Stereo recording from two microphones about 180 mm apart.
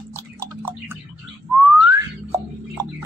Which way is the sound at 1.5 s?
5° right (ahead or behind).